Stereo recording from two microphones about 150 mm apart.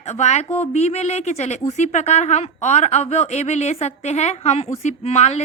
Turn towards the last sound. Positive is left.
turn(degrees=45)  # may be behind; listen again after turning